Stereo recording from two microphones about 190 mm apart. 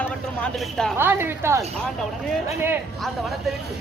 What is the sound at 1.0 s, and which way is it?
Speech, 10° right (ahead or behind).